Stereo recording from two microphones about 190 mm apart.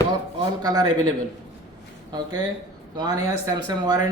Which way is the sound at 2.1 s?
20° right (ahead or behind).